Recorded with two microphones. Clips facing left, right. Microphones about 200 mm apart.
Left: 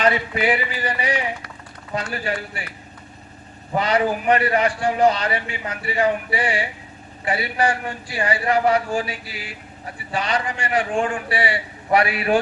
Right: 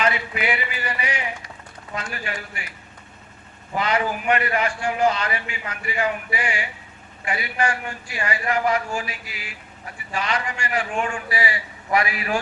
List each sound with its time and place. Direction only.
0.0 s a man's voice: 35° left (ahead or behind)
3.8 s a man's voice: 35° left (ahead or behind)